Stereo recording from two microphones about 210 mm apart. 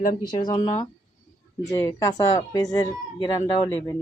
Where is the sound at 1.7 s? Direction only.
15° left (ahead or behind).